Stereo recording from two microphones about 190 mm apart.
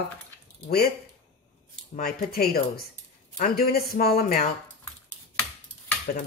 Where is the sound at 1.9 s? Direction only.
50° left (ahead or behind).